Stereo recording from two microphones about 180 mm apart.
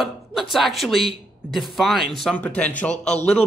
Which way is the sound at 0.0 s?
Centre (ahead or behind).